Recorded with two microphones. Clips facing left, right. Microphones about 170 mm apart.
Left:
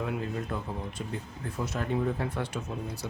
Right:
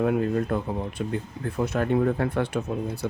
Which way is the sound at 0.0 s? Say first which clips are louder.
Right 10 dB; 55° right (ahead or behind).